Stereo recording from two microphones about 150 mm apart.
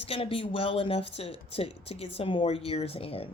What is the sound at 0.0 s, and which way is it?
Speech, 40° left (ahead or behind).